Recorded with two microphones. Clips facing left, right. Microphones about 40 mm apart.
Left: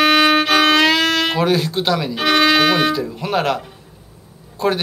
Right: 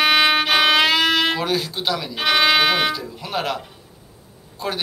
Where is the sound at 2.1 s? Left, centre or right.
Centre.